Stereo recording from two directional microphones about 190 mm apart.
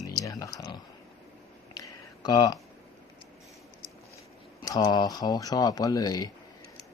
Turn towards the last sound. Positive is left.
turn(degrees=20)  # may be behind; listen again after turning